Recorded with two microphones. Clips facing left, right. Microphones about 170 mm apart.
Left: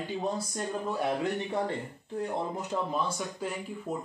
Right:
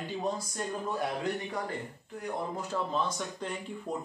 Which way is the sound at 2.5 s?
20° left (ahead or behind).